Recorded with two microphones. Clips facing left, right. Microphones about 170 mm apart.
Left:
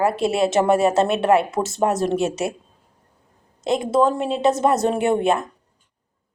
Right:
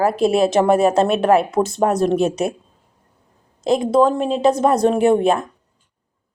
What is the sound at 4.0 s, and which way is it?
Speech, 30° right (ahead or behind).